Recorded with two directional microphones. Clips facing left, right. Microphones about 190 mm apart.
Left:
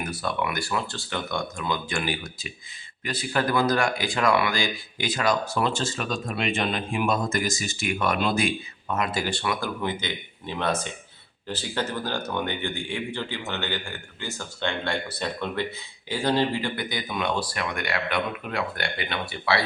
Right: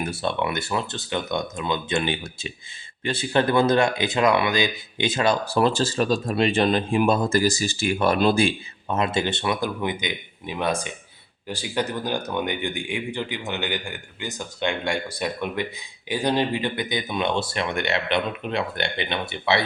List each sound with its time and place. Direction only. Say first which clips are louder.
0.0 s speech: right 3 dB; 25° right (ahead or behind)